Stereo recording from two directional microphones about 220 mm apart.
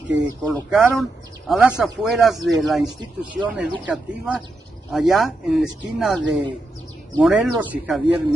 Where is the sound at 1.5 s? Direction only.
5° right (ahead or behind).